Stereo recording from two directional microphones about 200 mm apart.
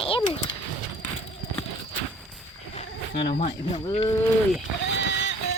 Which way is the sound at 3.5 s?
20° left (ahead or behind).